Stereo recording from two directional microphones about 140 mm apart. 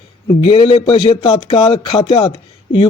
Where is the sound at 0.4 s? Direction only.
45° left (ahead or behind).